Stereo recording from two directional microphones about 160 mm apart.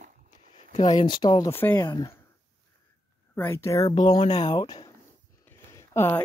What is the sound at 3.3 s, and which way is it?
Speech, 15° left (ahead or behind).